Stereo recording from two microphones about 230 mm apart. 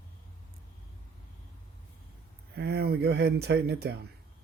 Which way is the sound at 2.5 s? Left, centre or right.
Right.